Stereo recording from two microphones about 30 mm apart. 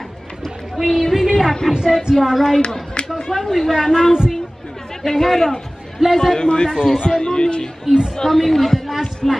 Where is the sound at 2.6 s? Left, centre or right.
Left.